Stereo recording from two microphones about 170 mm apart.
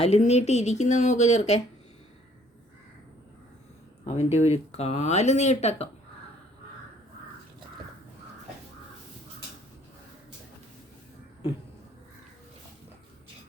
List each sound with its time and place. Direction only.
0.0 s speech: 40° left (ahead or behind)
4.0 s speech: 40° left (ahead or behind)